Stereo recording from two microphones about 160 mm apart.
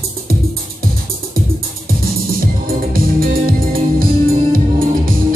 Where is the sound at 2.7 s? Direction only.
65° right (ahead or behind).